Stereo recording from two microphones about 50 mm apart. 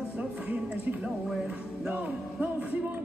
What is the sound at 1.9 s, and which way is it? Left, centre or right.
Speech, right.